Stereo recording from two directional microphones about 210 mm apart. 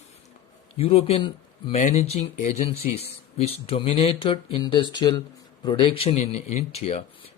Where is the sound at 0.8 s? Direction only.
30° left (ahead or behind).